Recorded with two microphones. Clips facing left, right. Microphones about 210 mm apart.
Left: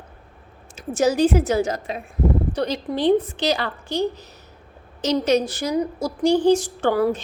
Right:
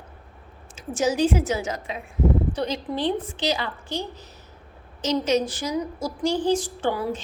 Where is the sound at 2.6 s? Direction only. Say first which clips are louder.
Left 4 dB; 65° left (ahead or behind).